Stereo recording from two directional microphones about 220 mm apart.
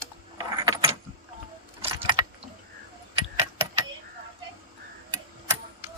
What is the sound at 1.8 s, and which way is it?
Keys jangling, 25° right (ahead or behind).